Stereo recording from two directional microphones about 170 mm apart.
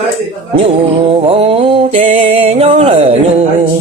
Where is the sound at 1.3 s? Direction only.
35° right (ahead or behind).